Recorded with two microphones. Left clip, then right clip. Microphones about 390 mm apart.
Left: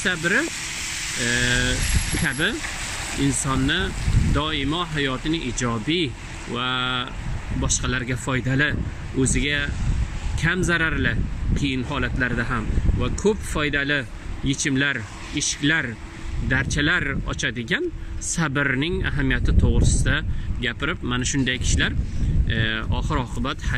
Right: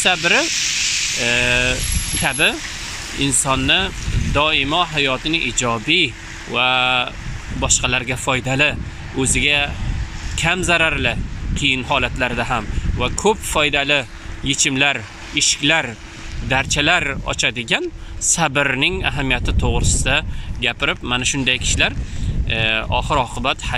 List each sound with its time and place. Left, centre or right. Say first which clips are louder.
0.0 s speech: right 6 dB; centre